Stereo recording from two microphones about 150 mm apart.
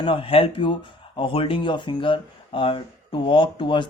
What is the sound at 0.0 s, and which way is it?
Speech, 35° left (ahead or behind).